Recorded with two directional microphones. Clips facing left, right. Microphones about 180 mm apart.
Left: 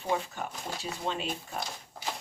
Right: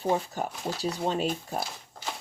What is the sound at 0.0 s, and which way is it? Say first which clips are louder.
Speech: right 4 dB; 35° right (ahead or behind).